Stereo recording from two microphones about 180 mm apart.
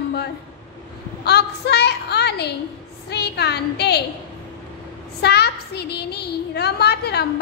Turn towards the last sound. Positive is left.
turn(degrees=65)  # may be behind; listen again after turning